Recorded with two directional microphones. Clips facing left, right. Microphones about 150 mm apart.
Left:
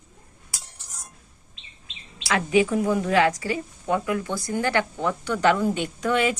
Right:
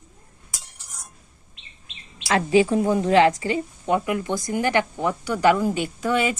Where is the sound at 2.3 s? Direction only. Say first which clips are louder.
Right 3 dB; 30° right (ahead or behind).